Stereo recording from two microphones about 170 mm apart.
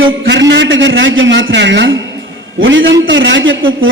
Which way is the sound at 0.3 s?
90° right.